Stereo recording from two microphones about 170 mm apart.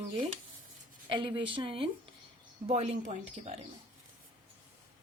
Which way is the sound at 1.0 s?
30° right (ahead or behind).